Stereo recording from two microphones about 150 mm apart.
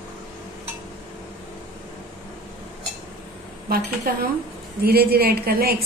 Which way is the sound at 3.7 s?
85° right.